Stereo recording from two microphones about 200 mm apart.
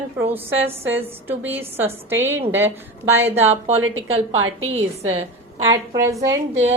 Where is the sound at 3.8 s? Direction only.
90° right.